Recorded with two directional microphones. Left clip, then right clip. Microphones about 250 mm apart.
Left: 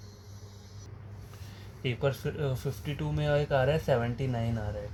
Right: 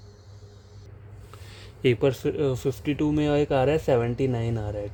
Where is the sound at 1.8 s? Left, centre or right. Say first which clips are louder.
Right 9 dB; right.